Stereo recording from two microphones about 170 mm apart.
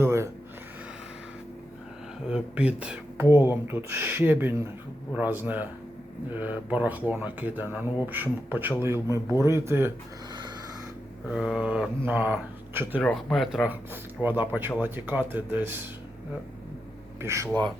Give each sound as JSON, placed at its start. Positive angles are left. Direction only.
{"t": 0.0, "sound": "a sound", "side_deg": -15}
{"t": 2.3, "sound": "speech", "side_deg": -5}
{"t": 11.3, "sound": "speech", "side_deg": -5}
{"t": 13.0, "sound": "speech", "side_deg": 5}
{"t": 17.2, "sound": "speech", "side_deg": -15}